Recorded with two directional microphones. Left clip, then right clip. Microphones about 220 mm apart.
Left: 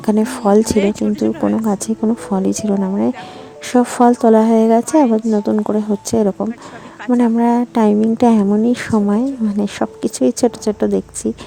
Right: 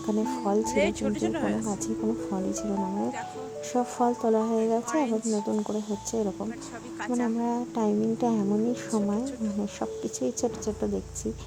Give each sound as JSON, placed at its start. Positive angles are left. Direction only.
{"t": 0.0, "sound": "speech", "side_deg": 45}
{"t": 0.8, "sound": "speech", "side_deg": -10}
{"t": 1.6, "sound": "speech", "side_deg": 45}